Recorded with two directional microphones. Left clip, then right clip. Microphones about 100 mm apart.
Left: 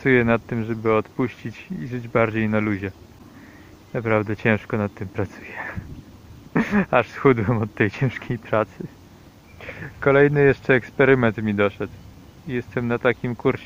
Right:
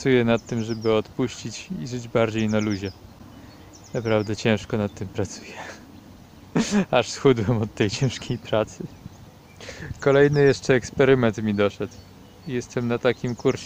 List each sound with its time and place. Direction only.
0.0 s speech: 30° right (ahead or behind)
3.9 s speech: 30° right (ahead or behind)